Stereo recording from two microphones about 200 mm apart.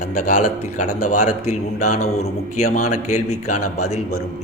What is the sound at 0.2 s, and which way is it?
A man's voice, 40° left (ahead or behind).